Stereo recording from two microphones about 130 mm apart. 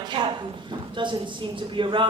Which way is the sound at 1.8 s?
40° right (ahead or behind).